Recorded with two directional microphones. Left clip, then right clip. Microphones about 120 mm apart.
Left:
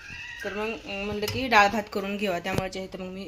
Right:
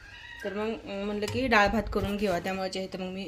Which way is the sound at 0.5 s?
10° right (ahead or behind).